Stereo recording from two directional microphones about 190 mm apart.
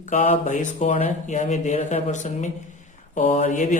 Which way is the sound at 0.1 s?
40° left (ahead or behind).